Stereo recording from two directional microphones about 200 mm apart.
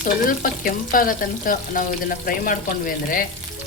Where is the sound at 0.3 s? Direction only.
45° left (ahead or behind).